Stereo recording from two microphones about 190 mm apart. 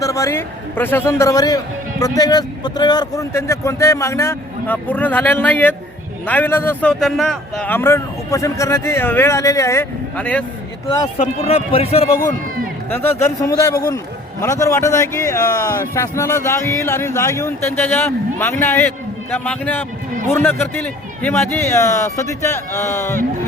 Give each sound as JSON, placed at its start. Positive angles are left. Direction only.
{"t": 0.0, "sound": "a man's voice", "side_deg": 15}
{"t": 10.8, "sound": "a man's voice", "side_deg": 20}
{"t": 11.2, "sound": "speech", "side_deg": 30}
{"t": 12.9, "sound": "a man's voice", "side_deg": 10}